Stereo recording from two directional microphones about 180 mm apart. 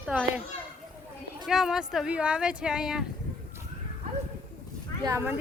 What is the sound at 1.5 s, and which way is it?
Speech, 5° right (ahead or behind).